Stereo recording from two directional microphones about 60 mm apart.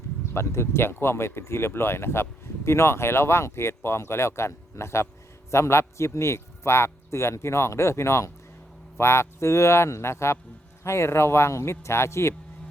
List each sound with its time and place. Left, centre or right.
0.3 s a man's voice: left